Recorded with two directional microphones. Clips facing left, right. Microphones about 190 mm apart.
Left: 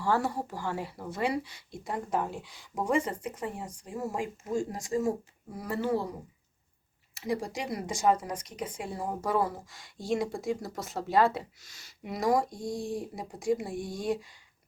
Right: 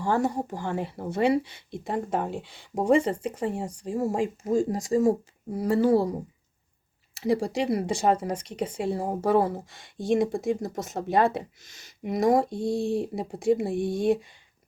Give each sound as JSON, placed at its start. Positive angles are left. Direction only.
{"t": 0.0, "sound": "speech", "side_deg": -20}
{"t": 7.3, "sound": "speech", "side_deg": -30}